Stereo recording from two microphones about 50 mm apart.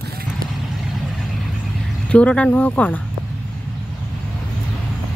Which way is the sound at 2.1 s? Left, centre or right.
Left.